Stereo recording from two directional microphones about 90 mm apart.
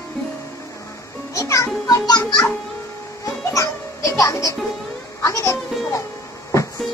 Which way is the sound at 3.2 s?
35° left (ahead or behind).